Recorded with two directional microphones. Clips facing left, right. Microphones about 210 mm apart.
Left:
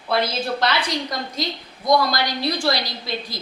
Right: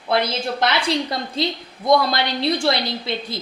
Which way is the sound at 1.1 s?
30° right (ahead or behind).